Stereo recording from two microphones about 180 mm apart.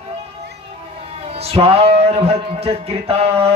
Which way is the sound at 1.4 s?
35° right (ahead or behind).